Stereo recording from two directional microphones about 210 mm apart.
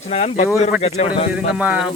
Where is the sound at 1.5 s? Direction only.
5° right (ahead or behind).